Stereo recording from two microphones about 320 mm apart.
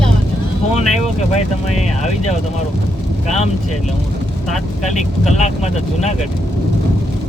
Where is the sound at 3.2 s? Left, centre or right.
Left.